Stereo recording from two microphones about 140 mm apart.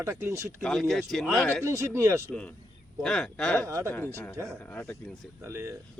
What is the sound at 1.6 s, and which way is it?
Speech, 20° right (ahead or behind).